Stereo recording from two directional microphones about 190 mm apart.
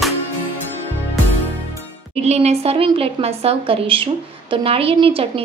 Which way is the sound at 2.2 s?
35° right (ahead or behind).